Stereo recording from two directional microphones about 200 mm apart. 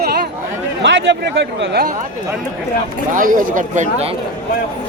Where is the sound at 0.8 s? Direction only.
65° right (ahead or behind).